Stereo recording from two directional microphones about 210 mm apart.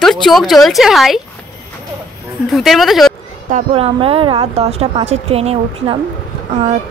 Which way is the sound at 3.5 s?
30° right (ahead or behind).